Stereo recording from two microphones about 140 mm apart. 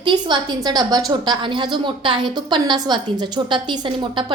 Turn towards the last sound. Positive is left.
turn(degrees=-35)  # may be behind; listen again after turning